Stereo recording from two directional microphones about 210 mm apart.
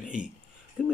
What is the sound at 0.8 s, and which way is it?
Speech, centre (ahead or behind).